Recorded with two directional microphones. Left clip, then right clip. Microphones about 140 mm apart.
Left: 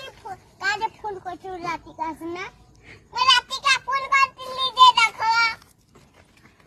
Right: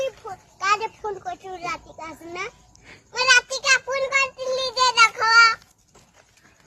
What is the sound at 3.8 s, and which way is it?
Child singing, 15° right (ahead or behind).